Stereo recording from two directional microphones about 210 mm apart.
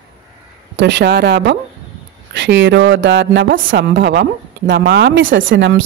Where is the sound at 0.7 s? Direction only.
55° right (ahead or behind).